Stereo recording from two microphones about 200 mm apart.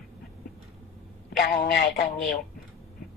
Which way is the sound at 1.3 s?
55° left (ahead or behind).